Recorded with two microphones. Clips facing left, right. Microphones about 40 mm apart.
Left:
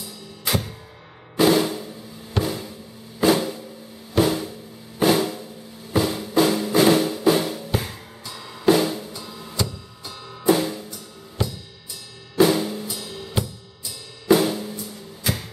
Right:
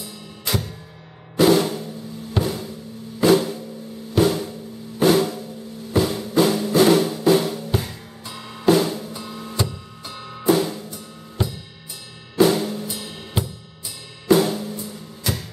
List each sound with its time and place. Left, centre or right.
0.5 s music: centre
2.3 s drum: centre
5.9 s music: centre
8.3 s music: centre
8.6 s music: centre
9.1 s music: right
10.4 s drum kit: centre
12.4 s drum kit: centre
12.8 s drum kit: right
14.3 s drum kit: centre